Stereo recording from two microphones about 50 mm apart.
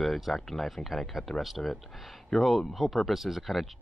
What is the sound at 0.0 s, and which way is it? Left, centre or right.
Speech, centre.